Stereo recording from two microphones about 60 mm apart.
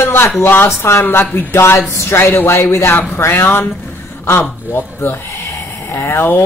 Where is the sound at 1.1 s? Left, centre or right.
Left.